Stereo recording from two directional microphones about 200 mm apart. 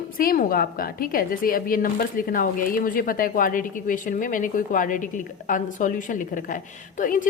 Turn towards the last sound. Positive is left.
turn(degrees=40)  # may be behind; listen again after turning